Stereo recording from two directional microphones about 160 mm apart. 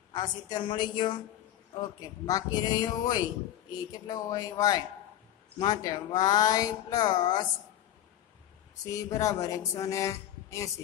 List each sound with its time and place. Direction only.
0.1 s speech: 25° left (ahead or behind)
8.8 s speech: 20° left (ahead or behind)